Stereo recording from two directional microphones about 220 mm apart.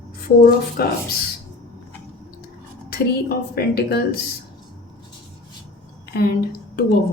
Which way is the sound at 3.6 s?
45° left (ahead or behind).